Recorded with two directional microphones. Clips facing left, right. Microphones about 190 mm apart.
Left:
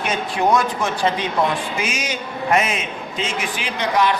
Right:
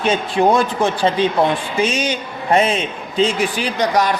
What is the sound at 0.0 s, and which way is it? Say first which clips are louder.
A man's voice: right 5 dB; 30° right (ahead or behind).